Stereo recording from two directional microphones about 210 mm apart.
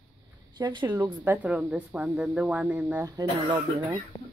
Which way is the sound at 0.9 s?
10° right (ahead or behind).